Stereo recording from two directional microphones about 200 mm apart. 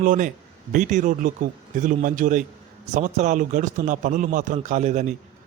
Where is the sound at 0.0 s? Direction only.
40° right (ahead or behind).